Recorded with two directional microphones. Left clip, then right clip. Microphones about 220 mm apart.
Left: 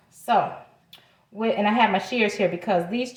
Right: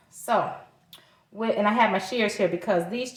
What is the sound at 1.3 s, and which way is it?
A woman's voice, 25° right (ahead or behind).